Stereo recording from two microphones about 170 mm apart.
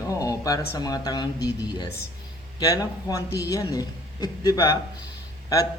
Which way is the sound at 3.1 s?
20° left (ahead or behind).